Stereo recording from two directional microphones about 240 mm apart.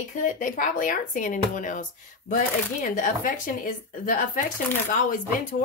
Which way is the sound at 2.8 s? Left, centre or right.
Left.